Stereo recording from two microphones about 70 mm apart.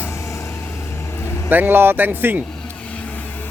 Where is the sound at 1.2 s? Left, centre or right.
Left.